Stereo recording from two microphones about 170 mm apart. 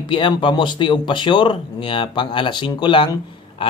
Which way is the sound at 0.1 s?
30° left (ahead or behind).